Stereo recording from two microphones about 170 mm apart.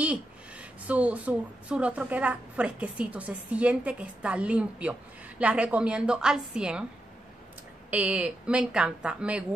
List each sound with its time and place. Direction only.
0.0 s a woman's voice: 5° right (ahead or behind)
7.9 s speech: 10° right (ahead or behind)